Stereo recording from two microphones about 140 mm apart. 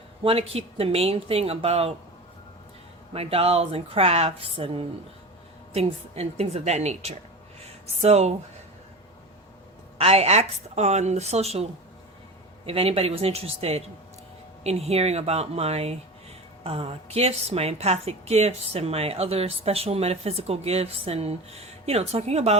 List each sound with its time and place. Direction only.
0.2 s a woman's voice: 45° right (ahead or behind)
3.1 s a woman's voice: 45° right (ahead or behind)
10.0 s a woman's voice: 45° right (ahead or behind)